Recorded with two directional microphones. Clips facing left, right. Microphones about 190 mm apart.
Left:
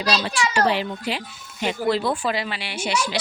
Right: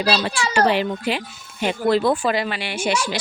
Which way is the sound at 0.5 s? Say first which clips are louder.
Right 5 dB; 55° right (ahead or behind).